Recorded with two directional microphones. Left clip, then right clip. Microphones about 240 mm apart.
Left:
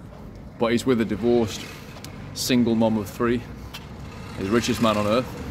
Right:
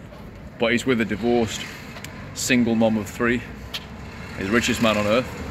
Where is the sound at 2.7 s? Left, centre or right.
Centre.